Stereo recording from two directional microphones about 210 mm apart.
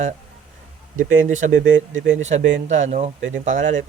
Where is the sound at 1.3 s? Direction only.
35° right (ahead or behind).